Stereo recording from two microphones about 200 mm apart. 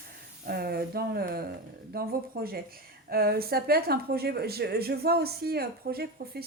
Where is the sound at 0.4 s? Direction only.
50° right (ahead or behind).